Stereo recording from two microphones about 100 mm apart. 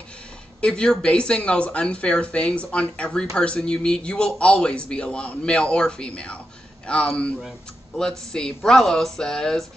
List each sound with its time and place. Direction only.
0.6 s speech: 10° left (ahead or behind)